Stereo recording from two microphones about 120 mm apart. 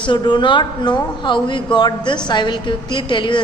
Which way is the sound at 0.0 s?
40° left (ahead or behind).